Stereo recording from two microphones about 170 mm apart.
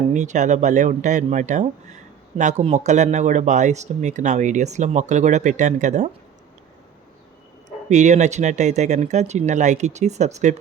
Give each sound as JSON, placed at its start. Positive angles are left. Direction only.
{"t": 0.1, "sound": "speech", "side_deg": -45}
{"t": 7.9, "sound": "speech", "side_deg": -45}